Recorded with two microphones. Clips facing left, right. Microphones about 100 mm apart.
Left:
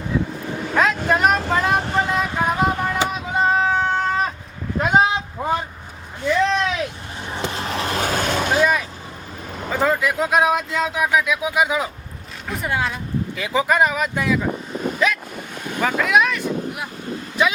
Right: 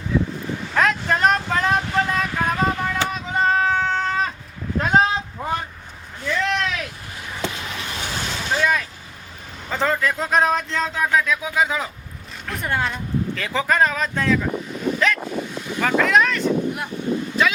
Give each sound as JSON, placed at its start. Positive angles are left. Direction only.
{"t": 0.8, "sound": "vehicle", "side_deg": 10}
{"t": 2.0, "sound": "a sound", "side_deg": 20}
{"t": 7.3, "sound": "vehicle", "side_deg": 30}
{"t": 7.9, "sound": "vehicle", "side_deg": 50}
{"t": 8.5, "sound": "vehicle", "side_deg": 15}
{"t": 9.7, "sound": "speech", "side_deg": 10}
{"t": 12.5, "sound": "a sound", "side_deg": 5}
{"t": 13.4, "sound": "speech", "side_deg": 15}
{"t": 15.5, "sound": "boat", "side_deg": 55}
{"t": 15.8, "sound": "vehicle", "side_deg": 10}